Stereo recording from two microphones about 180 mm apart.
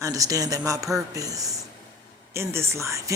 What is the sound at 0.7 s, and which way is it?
Speech, 20° right (ahead or behind).